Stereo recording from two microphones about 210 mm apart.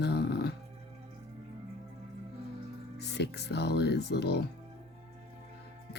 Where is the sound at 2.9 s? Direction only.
50° left (ahead or behind).